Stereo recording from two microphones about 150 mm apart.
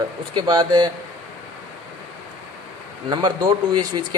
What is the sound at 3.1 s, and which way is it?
Speech, 30° right (ahead or behind).